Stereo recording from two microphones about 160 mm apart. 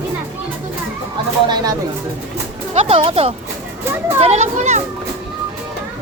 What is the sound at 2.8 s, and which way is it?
Speech, 35° right (ahead or behind).